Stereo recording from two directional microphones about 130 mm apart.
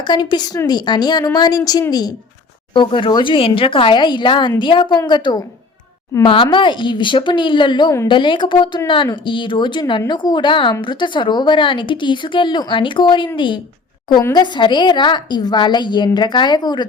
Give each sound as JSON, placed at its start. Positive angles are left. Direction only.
{"t": 0.0, "sound": "a woman's voice", "side_deg": 35}
{"t": 2.7, "sound": "a woman's voice", "side_deg": 40}